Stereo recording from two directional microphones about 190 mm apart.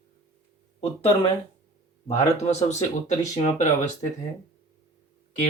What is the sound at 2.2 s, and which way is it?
Speech, 35° left (ahead or behind).